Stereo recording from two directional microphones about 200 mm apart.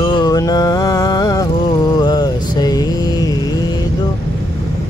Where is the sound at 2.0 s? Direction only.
20° left (ahead or behind).